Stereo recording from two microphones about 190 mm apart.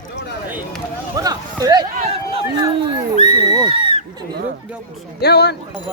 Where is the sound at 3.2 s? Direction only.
30° left (ahead or behind).